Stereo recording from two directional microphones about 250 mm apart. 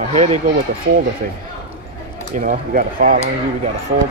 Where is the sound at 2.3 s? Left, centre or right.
Right.